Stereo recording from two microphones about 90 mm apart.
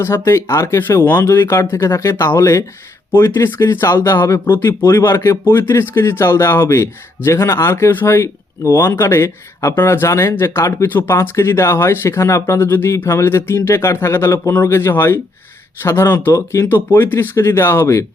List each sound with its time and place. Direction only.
0.0 s speech: 30° left (ahead or behind)
16.6 s speech: 25° left (ahead or behind)